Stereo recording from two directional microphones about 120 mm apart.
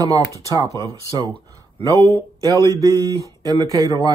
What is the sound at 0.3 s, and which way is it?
Speech, 30° right (ahead or behind).